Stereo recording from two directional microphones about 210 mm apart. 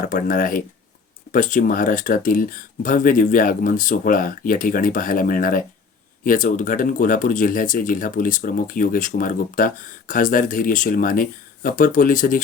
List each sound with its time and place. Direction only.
0.0 s speech: 40° left (ahead or behind)